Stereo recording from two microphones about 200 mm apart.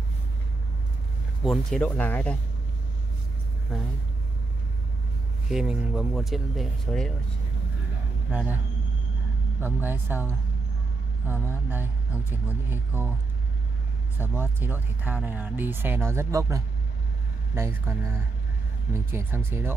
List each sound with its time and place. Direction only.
1.4 s speech: centre (ahead or behind)
5.5 s speech: 5° right (ahead or behind)
8.3 s speech: 10° right (ahead or behind)
9.6 s speech: 10° right (ahead or behind)
12.6 s speech: 10° right (ahead or behind)
14.1 s speech: 10° right (ahead or behind)